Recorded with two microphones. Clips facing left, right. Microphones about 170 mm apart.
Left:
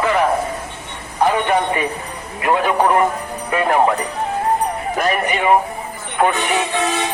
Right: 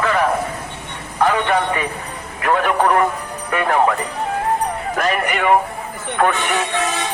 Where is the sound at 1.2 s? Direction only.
15° left (ahead or behind).